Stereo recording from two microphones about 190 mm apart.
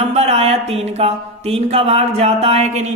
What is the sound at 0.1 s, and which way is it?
Speech, 35° right (ahead or behind).